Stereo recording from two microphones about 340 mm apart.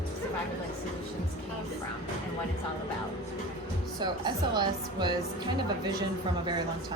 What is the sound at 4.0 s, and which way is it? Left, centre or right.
Speech, centre.